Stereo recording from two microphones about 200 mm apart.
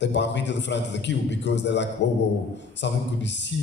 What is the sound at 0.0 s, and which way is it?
A man's voice, 60° left (ahead or behind).